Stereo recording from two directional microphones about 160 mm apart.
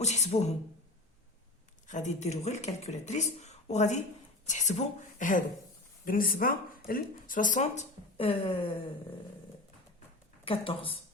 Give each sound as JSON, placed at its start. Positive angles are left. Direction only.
{"t": 0.0, "sound": "speech", "side_deg": 45}
{"t": 1.9, "sound": "a woman's voice", "side_deg": 45}
{"t": 6.1, "sound": "speech", "side_deg": 65}
{"t": 10.4, "sound": "speech", "side_deg": 35}